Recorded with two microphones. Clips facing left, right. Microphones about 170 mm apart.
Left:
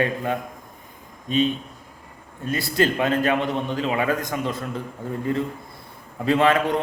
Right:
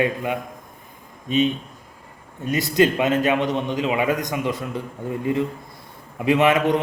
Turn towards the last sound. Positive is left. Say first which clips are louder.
# right 2 dB
turn(degrees=-20)  # may be behind; listen again after turning